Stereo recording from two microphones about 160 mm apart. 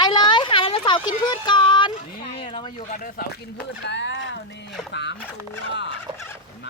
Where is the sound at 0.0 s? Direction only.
30° left (ahead or behind).